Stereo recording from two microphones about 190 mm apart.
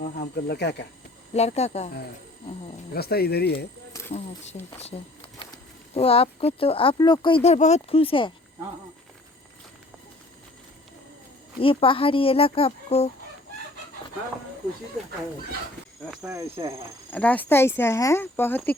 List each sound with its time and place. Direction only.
0.0 s speech: 60° left (ahead or behind)
1.3 s speech: 35° left (ahead or behind)
2.9 s speech: 55° left (ahead or behind)
4.5 s speech: 35° left (ahead or behind)
11.6 s speech: 30° left (ahead or behind)
16.0 s speech: centre (ahead or behind)
16.3 s speech: 15° right (ahead or behind)
17.1 s speech: 10° left (ahead or behind)